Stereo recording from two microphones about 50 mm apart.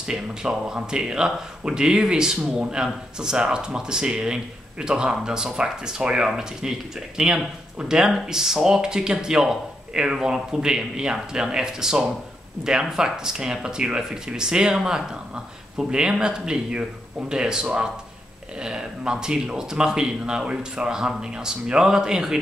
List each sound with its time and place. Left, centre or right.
0.0 s speech: centre